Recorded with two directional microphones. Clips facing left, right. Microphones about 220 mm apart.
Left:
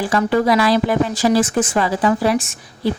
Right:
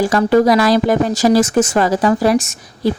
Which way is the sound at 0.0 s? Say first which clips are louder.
Right 5 dB; 40° right (ahead or behind).